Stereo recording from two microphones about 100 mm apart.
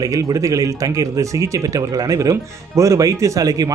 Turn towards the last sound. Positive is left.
turn(degrees=-35)  # may be behind; listen again after turning